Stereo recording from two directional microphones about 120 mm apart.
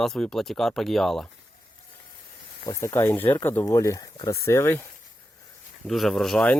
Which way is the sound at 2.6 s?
20° left (ahead or behind).